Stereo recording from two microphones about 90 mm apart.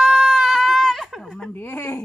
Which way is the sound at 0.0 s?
5° right (ahead or behind).